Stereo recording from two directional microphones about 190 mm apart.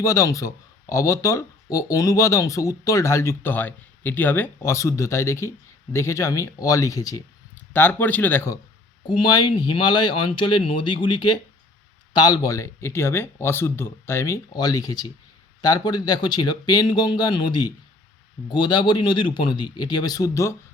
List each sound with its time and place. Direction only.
0.0 s speech: 15° left (ahead or behind)
9.0 s speech: 20° left (ahead or behind)